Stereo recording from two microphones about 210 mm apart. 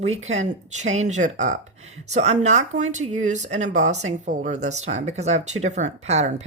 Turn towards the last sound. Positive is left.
turn(degrees=-30)  # may be behind; listen again after turning